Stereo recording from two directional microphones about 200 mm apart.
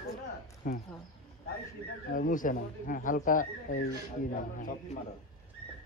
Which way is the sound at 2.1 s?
45° left (ahead or behind).